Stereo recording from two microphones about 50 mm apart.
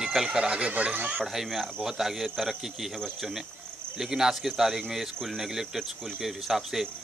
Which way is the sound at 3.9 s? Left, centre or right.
Centre.